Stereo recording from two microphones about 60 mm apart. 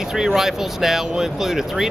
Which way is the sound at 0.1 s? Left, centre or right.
Centre.